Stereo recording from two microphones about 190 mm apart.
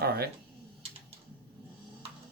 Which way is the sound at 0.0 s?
55° right (ahead or behind).